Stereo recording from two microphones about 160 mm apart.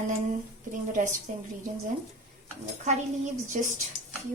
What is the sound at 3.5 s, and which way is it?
Speech, 55° right (ahead or behind).